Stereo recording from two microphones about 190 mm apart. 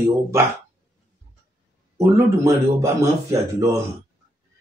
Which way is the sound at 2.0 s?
15° right (ahead or behind).